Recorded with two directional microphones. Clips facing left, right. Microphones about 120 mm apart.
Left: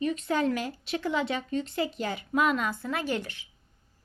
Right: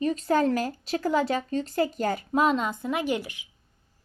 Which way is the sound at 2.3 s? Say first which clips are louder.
Right 1 dB; 30° right (ahead or behind).